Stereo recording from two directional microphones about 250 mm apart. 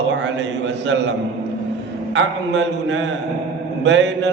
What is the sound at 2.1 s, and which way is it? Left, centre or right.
Mantra, right.